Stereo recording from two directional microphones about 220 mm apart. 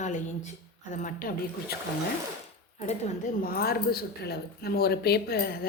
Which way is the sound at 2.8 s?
35° left (ahead or behind).